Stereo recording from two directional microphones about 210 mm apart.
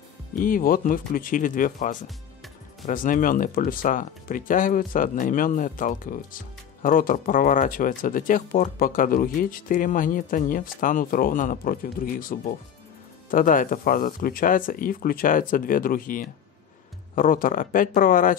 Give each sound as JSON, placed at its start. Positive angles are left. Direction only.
{"t": 0.4, "sound": "speech", "side_deg": 40}